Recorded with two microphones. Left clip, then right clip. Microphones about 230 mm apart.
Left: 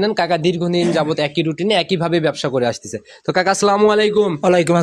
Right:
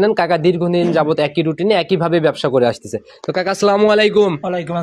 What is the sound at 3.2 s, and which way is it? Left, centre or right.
Speech, centre.